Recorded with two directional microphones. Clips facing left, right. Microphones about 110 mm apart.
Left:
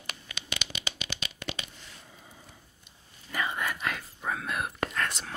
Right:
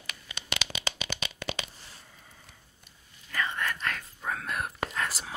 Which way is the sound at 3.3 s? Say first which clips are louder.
Even; 10° left (ahead or behind).